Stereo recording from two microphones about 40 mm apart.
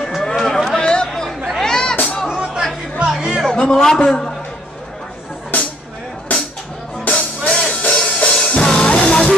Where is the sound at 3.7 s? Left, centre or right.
Centre.